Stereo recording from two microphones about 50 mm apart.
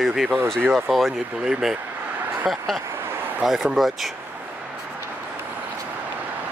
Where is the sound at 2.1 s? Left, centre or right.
Right.